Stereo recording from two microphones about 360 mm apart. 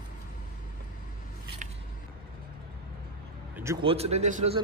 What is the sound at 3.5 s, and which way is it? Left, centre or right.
A man's voice, centre.